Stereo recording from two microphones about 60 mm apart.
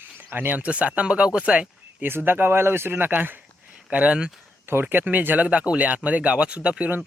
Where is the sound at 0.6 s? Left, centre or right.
Right.